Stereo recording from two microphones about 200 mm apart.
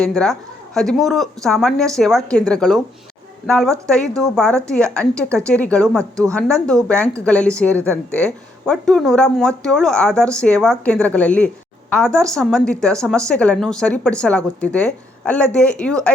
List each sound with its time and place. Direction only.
0.0 s a woman's voice: 5° left (ahead or behind)